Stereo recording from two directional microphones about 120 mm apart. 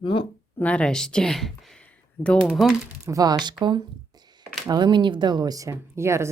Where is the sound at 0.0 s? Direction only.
45° left (ahead or behind).